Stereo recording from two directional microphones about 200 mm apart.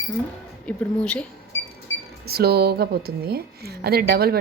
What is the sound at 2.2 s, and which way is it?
A woman's voice, 50° right (ahead or behind).